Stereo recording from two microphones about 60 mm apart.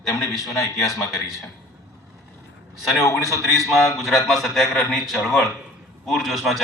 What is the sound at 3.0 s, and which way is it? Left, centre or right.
Speech, left.